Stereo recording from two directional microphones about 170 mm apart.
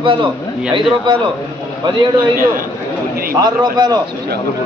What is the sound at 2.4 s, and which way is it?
Speech, 55° right (ahead or behind).